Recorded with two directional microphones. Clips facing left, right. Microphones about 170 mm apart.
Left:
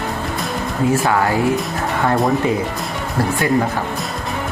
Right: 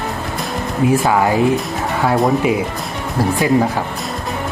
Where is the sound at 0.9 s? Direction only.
15° right (ahead or behind).